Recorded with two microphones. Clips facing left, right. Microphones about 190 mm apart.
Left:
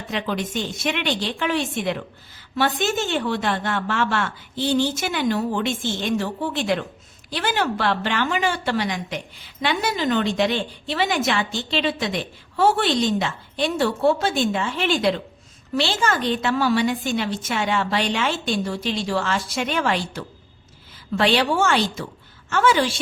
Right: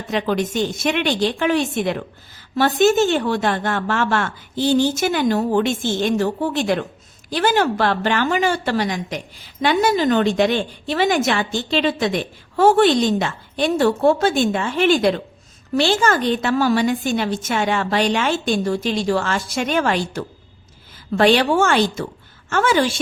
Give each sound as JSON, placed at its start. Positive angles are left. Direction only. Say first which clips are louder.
{"t": 0.1, "sound": "a woman's voice", "louder": "right 5 dB", "side_deg": -45}